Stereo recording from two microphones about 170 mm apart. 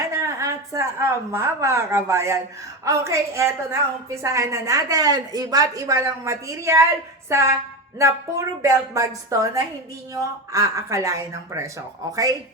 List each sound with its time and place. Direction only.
0.0 s a woman's voice: 20° right (ahead or behind)